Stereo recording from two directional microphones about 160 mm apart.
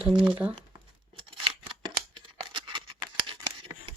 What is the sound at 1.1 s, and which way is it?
Scissors, 35° right (ahead or behind).